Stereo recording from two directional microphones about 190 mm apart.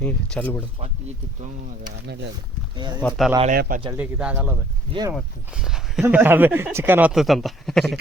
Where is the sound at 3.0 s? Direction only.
10° left (ahead or behind).